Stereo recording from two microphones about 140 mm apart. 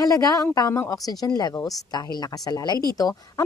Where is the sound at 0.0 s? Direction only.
25° left (ahead or behind).